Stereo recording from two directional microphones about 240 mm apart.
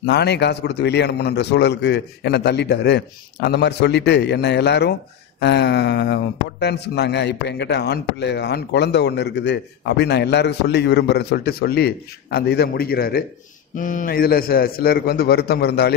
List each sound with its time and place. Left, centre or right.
0.0 s a man's voice: left